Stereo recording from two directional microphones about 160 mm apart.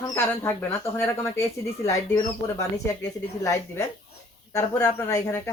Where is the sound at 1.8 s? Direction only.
20° left (ahead or behind).